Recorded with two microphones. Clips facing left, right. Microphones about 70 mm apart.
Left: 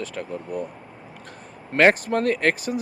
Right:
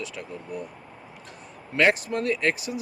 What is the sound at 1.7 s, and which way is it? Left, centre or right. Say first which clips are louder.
Speech: left 4 dB; left.